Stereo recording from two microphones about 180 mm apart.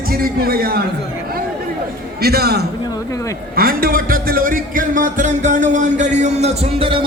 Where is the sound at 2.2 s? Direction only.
60° right (ahead or behind).